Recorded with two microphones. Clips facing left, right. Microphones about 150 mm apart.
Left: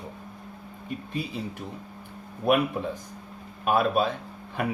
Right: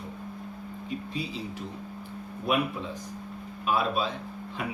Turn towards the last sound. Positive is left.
turn(degrees=55)  # may be behind; listen again after turning